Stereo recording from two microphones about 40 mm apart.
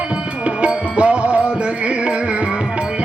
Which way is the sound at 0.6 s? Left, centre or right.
Right.